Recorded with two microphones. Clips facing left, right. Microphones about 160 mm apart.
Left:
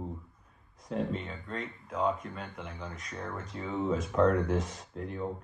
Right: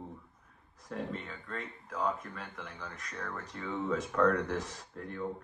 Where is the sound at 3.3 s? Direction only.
Centre (ahead or behind).